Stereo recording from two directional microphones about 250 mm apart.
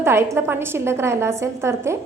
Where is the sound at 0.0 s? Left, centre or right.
Centre.